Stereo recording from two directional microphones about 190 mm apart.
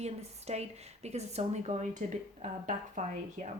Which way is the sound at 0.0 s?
35° right (ahead or behind).